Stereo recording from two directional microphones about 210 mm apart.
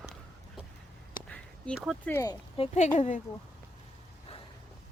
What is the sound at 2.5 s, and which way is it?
Speech, 35° left (ahead or behind).